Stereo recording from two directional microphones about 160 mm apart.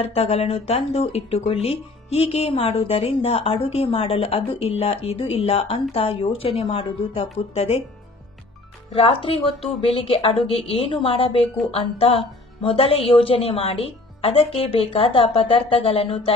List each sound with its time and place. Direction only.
0.0 s speech: 40° left (ahead or behind)
8.9 s speech: 35° left (ahead or behind)